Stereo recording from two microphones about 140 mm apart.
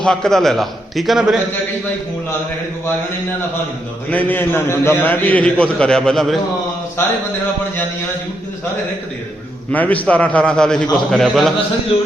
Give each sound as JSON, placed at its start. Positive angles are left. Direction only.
{"t": 0.0, "sound": "a man's voice", "side_deg": 5}
{"t": 4.1, "sound": "a man's voice", "side_deg": 10}
{"t": 9.7, "sound": "a man's voice", "side_deg": 10}
{"t": 11.9, "sound": "a man's voice", "side_deg": 40}